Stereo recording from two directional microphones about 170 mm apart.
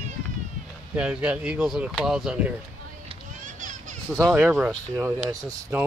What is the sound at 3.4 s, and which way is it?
Children playing, 45° right (ahead or behind).